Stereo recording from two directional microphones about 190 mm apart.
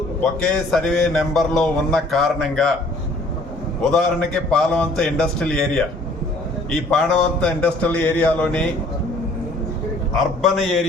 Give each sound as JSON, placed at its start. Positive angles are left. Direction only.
{"t": 0.2, "sound": "a man's voice", "side_deg": 5}
{"t": 3.9, "sound": "a man's voice", "side_deg": 5}
{"t": 10.4, "sound": "a man's voice", "side_deg": 0}